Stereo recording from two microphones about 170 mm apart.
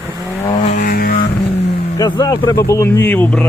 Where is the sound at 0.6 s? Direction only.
45° left (ahead or behind).